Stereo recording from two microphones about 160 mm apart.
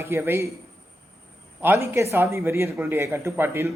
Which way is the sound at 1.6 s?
15° right (ahead or behind).